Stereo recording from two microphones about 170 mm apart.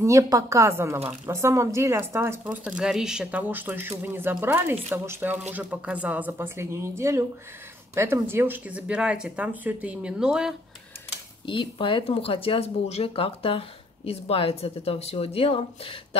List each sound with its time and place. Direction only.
0.0 s speech: 20° right (ahead or behind); by 10.5 s 5° right (ahead or behind)
11.4 s speech: 30° left (ahead or behind)